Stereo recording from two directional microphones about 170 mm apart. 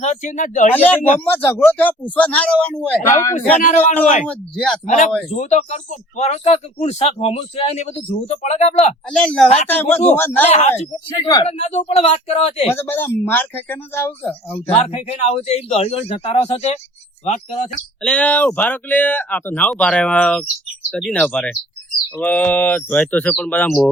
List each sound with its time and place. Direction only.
0.0 s speech: 45° left (ahead or behind)
1.2 s speech: 10° left (ahead or behind)
3.1 s speech: 15° left (ahead or behind)
3.6 s speech: 40° left (ahead or behind)
4.3 s speech: 5° left (ahead or behind)
4.9 s speech: 50° left (ahead or behind)
9.1 s speech: 5° left (ahead or behind)
10.5 s speech: 40° left (ahead or behind)
11.2 s speech: 25° left (ahead or behind)
11.4 s speech: 40° left (ahead or behind)
12.7 s speech: 15° left (ahead or behind)
14.5 s speech: 35° left (ahead or behind)
18.0 s speech: 10° left (ahead or behind)